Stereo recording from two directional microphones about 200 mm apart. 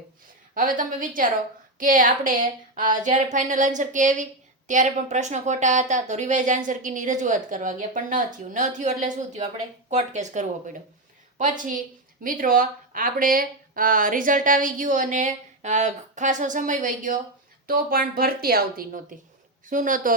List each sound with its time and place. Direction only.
0.5 s a woman's voice: 40° right (ahead or behind)